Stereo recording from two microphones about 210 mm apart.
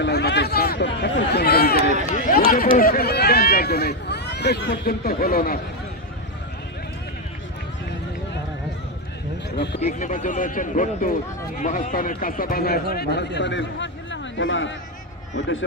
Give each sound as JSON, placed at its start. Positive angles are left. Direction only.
{"t": 0.0, "sound": "a sound", "side_deg": 50}
{"t": 2.1, "sound": "run", "side_deg": 40}
{"t": 9.8, "sound": "speech", "side_deg": 35}